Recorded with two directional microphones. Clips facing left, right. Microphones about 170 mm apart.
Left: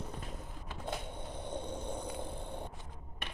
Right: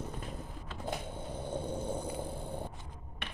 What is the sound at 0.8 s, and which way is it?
Skateboard, 5° right (ahead or behind).